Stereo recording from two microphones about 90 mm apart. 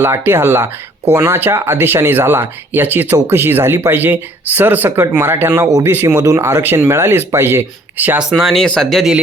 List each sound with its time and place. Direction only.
0.0 s speech: 25° right (ahead or behind)
5.6 s speech: 40° right (ahead or behind)
5.9 s speech: 25° right (ahead or behind)
8.2 s speech: 5° right (ahead or behind)